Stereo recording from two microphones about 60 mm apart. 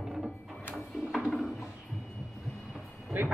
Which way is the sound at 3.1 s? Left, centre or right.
Right.